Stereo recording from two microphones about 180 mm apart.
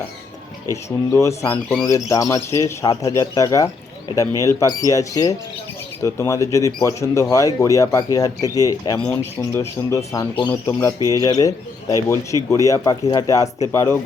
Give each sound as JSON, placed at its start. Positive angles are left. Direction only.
{"t": 0.7, "sound": "speech", "side_deg": 15}